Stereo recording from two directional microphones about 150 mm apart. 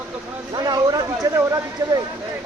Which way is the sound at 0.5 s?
25° right (ahead or behind).